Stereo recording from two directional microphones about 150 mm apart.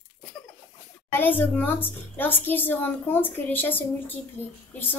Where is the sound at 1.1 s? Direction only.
15° left (ahead or behind).